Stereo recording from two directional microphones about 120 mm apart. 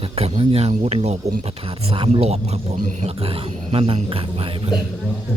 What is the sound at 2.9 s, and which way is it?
Speech, 90° right.